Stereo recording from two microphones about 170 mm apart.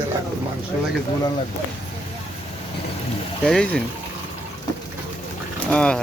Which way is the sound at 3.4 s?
5° left (ahead or behind).